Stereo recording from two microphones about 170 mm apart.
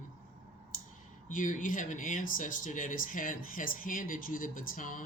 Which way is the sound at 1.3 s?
50° left (ahead or behind).